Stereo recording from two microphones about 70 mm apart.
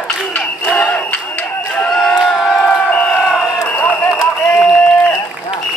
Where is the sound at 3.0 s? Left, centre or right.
Centre.